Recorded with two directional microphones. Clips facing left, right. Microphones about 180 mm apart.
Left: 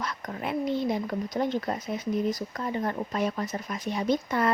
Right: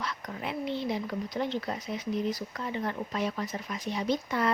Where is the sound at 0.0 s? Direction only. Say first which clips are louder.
Left 3 dB; 50° left (ahead or behind).